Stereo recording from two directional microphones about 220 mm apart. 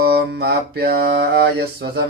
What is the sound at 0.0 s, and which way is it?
Mantra, 45° right (ahead or behind).